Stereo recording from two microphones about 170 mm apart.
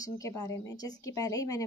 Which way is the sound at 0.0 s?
20° left (ahead or behind).